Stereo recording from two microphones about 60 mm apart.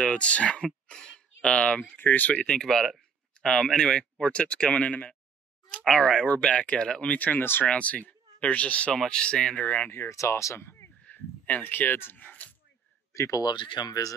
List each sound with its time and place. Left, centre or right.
0.0 s speech: centre
0.8 s a sound: centre
2.0 s speech: left
5.9 s speech: centre
7.1 s speech: left
7.6 s speech: left
8.9 s speech: centre
10.0 s speech: left
11.1 s a sound: left
13.1 s speech: left